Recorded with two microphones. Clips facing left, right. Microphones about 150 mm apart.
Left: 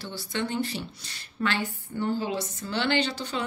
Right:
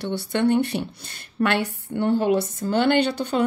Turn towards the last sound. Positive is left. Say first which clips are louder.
# right 8 dB
turn(degrees=-55)  # may be behind; listen again after turning